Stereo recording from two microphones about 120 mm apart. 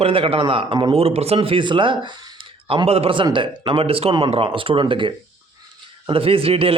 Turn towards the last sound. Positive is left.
turn(degrees=-50)  # may be behind; listen again after turning